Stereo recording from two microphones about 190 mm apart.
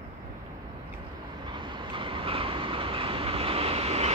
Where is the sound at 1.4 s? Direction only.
25° right (ahead or behind).